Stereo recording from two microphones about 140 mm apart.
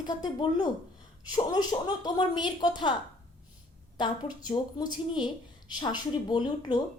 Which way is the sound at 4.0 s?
30° left (ahead or behind).